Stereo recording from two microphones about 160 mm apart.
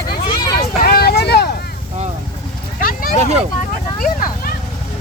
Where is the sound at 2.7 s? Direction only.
60° left (ahead or behind).